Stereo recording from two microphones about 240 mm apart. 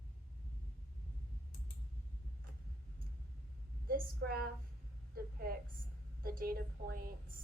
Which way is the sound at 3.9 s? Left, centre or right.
Right.